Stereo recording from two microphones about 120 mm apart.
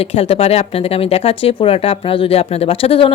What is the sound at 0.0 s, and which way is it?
Speech, 55° left (ahead or behind).